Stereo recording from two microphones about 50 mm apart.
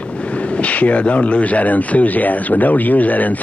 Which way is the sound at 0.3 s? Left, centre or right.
Left.